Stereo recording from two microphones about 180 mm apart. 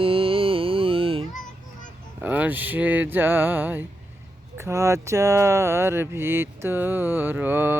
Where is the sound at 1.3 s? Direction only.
45° left (ahead or behind).